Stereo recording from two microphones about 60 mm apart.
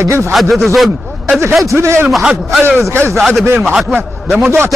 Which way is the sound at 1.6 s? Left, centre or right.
Right.